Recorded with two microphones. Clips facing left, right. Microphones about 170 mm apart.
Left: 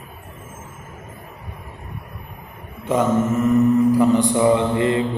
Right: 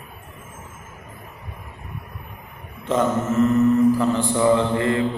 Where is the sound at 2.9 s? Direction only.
10° left (ahead or behind).